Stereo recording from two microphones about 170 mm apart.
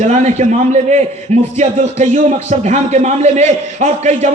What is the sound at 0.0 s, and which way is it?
A man's voice, 45° right (ahead or behind).